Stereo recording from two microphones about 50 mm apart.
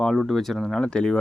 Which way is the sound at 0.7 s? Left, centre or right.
Centre.